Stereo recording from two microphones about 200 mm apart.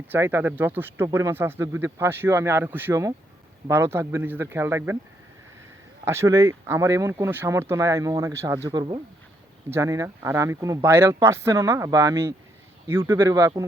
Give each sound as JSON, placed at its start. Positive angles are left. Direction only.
{"t": 0.1, "sound": "speech", "side_deg": -10}
{"t": 6.1, "sound": "speech", "side_deg": -15}